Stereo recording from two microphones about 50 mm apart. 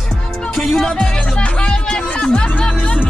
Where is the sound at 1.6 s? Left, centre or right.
Left.